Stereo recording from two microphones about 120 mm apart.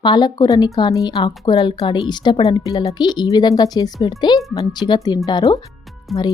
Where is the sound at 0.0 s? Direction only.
35° left (ahead or behind).